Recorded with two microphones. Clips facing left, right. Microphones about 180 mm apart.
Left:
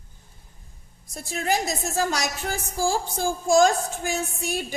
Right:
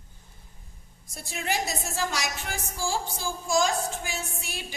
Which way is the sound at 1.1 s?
40° left (ahead or behind).